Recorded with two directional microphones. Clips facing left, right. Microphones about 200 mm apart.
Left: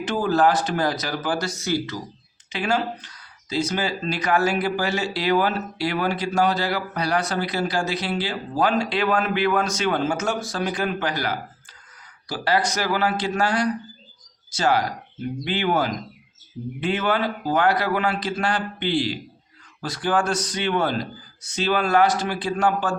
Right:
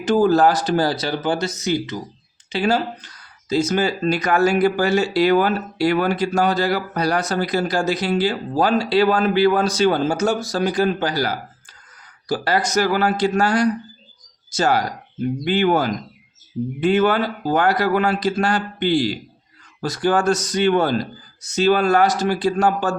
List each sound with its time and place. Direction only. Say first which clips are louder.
0.0 s speech: right 5 dB; 40° right (ahead or behind); by 2.0 s 20° right (ahead or behind)
2.5 s speech: right 4 dB; 35° right (ahead or behind)
3.5 s speech: right 5 dB; 45° right (ahead or behind)